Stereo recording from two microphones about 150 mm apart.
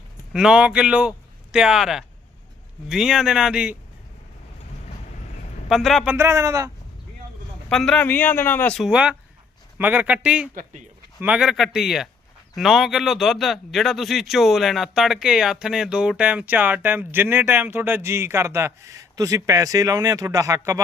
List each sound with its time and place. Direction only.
0.3 s a man's voice: 5° right (ahead or behind)
5.6 s speech: centre (ahead or behind)
6.1 s speech: 20° right (ahead or behind)
7.7 s speech: 5° left (ahead or behind)
8.8 s a man's voice: 5° right (ahead or behind)
10.5 s speech: 60° right (ahead or behind)
11.2 s a man's voice: 5° right (ahead or behind)